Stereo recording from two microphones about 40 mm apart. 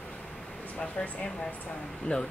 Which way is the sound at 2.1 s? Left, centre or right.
Left.